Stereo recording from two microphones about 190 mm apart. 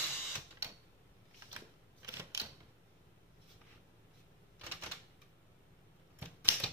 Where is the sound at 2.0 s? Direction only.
15° right (ahead or behind).